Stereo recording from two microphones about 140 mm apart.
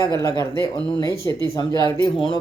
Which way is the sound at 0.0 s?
25° left (ahead or behind).